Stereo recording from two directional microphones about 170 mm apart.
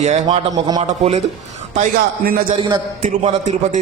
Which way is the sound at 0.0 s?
45° right (ahead or behind).